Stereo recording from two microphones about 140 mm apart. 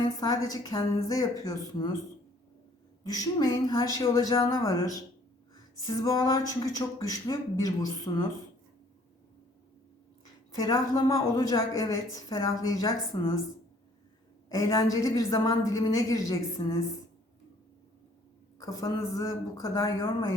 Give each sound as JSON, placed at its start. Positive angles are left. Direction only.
{"t": 0.0, "sound": "a woman's voice", "side_deg": 30}
{"t": 3.0, "sound": "a woman's voice", "side_deg": 25}
{"t": 5.7, "sound": "a woman's voice", "side_deg": 25}
{"t": 10.7, "sound": "a woman's voice", "side_deg": 25}
{"t": 14.5, "sound": "a woman's voice", "side_deg": 25}
{"t": 18.6, "sound": "a woman's voice", "side_deg": 25}